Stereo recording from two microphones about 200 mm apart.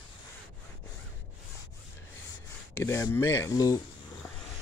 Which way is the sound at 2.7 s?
15° left (ahead or behind).